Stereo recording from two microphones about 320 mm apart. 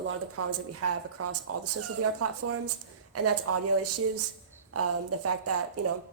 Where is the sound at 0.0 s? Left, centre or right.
Right.